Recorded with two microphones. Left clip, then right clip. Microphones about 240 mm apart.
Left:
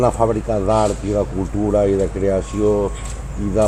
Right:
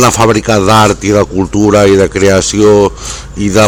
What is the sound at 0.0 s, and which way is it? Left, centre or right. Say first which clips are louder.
Speech: right 9 dB; right.